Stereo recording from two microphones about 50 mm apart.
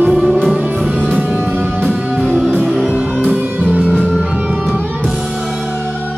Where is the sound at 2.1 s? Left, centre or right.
Centre.